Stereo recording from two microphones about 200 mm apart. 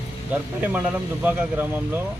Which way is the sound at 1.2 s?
10° right (ahead or behind).